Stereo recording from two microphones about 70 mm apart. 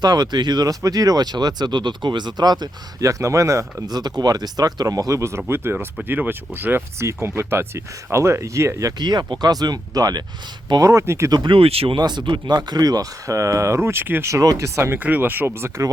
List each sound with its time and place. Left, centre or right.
0.0 s speech: right
3.0 s speech: right
3.8 s speech: right
5.5 s speech: right
7.0 s speech: right
9.0 s speech: right
10.7 s speech: right
11.0 s speech: right
11.9 s speech: right
14.3 s speech: right
14.9 s speech: right